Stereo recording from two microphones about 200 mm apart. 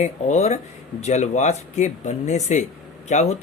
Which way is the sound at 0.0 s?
35° left (ahead or behind).